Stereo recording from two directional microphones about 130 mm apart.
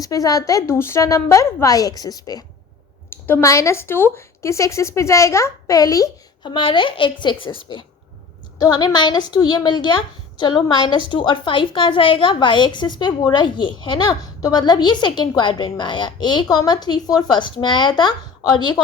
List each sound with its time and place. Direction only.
0.0 s a woman's voice: 25° left (ahead or behind)
3.1 s a woman's voice: 15° left (ahead or behind)
6.4 s a woman's voice: 40° left (ahead or behind)
8.5 s a woman's voice: 30° left (ahead or behind)